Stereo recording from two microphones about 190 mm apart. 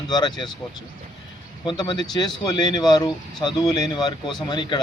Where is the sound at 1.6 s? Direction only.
25° left (ahead or behind).